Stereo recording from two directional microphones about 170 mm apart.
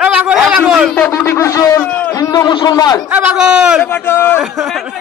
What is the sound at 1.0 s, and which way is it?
Speech, 10° left (ahead or behind).